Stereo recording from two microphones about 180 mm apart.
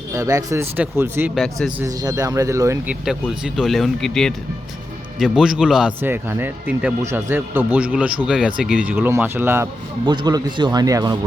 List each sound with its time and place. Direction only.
0.1 s speech: 20° right (ahead or behind)
1.4 s speech: centre (ahead or behind)
1.8 s speech: 20° right (ahead or behind)
3.0 s speech: 5° right (ahead or behind)
10.1 s a man's voice: 25° right (ahead or behind)